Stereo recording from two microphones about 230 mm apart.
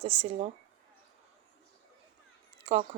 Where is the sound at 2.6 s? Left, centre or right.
Right.